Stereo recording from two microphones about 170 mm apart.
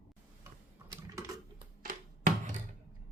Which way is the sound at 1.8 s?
50° right (ahead or behind).